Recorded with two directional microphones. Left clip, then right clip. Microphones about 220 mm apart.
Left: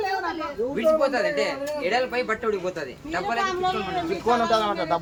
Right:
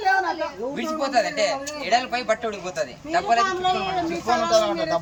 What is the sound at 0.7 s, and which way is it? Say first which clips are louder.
Speech: left 2 dB; 15° left (ahead or behind).